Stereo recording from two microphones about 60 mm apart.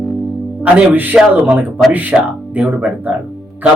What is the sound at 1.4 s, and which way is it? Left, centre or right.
Speech, right.